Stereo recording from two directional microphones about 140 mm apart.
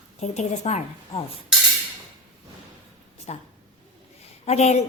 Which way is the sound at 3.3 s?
50° left (ahead or behind).